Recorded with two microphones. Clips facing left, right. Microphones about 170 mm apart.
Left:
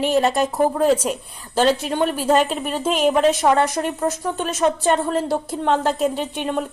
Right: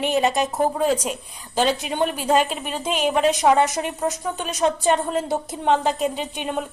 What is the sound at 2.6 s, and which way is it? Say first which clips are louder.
Speech: left 4 dB; centre (ahead or behind).